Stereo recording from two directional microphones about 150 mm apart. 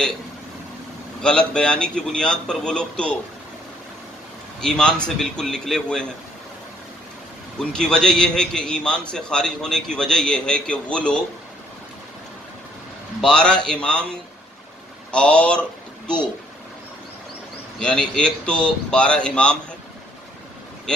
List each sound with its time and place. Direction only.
1.2 s a man's voice: 5° left (ahead or behind)
4.6 s a man's voice: 5° left (ahead or behind)
7.7 s a man's voice: 5° left (ahead or behind)
13.2 s a man's voice: 5° left (ahead or behind)
15.0 s speech: 5° left (ahead or behind)
17.7 s speech: 5° left (ahead or behind)